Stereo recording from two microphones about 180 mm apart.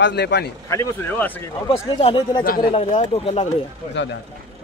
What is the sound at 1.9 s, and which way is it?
Speech, 30° left (ahead or behind).